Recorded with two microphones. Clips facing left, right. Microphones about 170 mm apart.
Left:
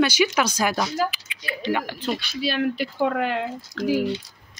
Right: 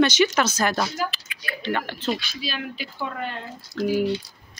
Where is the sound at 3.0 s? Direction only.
75° left (ahead or behind).